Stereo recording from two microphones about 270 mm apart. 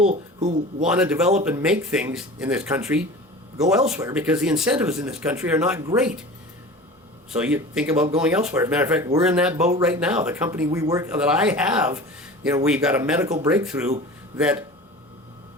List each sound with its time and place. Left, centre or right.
0.0 s speech: right
0.8 s speech: centre
7.3 s speech: centre